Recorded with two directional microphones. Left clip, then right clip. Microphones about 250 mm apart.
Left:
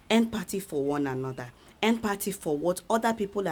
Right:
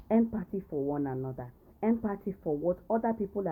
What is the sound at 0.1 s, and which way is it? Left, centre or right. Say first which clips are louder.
Speech: left 3 dB; left.